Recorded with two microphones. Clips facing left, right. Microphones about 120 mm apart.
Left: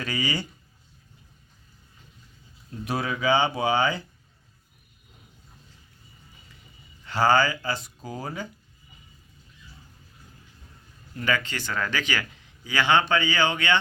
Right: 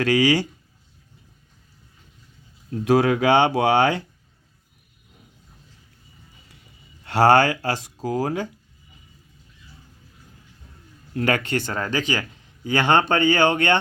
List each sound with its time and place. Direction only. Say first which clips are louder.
0.0 s speech: right 11 dB; 85° right
2.6 s speech: right 11 dB; 90° right; by 4.0 s 75° right (ahead or behind)
7.0 s speech: right 5 dB; 70° right (ahead or behind)
8.0 s speech: right 12 dB; 85° right
11.1 s speech: right 6 dB; 70° right (ahead or behind)
11.7 s speech: even; 35° right (ahead or behind)
12.6 s speech: right 3 dB; 50° right (ahead or behind)